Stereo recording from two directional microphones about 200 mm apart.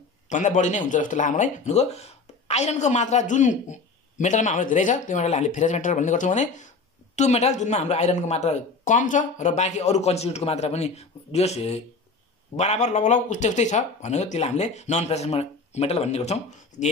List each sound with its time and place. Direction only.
0.3 s speech: 40° left (ahead or behind)